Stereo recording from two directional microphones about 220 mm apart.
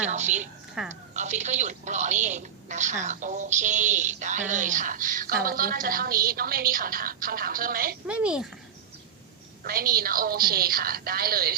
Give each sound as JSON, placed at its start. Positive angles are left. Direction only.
{"t": 0.0, "sound": "a woman's voice", "side_deg": -30}
{"t": 0.8, "sound": "speech", "side_deg": -5}
{"t": 1.1, "sound": "a woman's voice", "side_deg": -35}
{"t": 8.0, "sound": "speech", "side_deg": -5}
{"t": 9.6, "sound": "a woman's voice", "side_deg": -40}